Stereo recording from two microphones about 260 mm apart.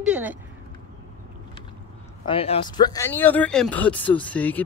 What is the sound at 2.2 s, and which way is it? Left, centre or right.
A woman's voice, left.